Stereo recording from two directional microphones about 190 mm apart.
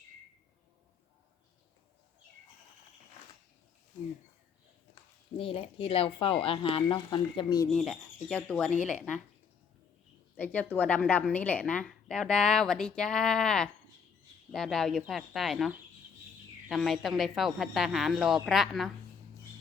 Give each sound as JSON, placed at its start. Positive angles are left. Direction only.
{"t": 5.4, "sound": "speech", "side_deg": 30}
{"t": 7.7, "sound": "a woman's voice", "side_deg": 5}
{"t": 10.3, "sound": "a woman's voice", "side_deg": 10}